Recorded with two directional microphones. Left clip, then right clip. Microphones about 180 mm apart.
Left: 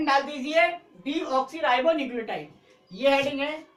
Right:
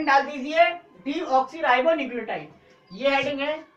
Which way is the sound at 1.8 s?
25° left (ahead or behind).